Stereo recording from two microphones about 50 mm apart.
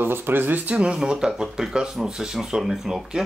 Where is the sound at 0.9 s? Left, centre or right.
Centre.